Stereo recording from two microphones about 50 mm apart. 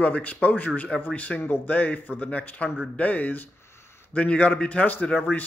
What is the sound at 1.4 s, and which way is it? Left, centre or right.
Speech, left.